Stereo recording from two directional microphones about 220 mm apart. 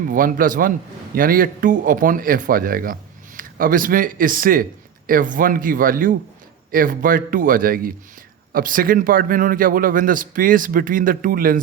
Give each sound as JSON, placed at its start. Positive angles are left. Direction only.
{"t": 0.1, "sound": "speech", "side_deg": -40}